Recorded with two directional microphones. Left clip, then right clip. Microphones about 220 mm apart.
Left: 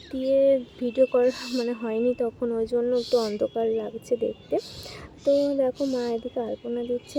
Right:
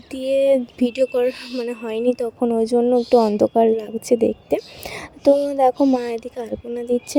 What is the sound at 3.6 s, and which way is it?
Speech, 40° right (ahead or behind).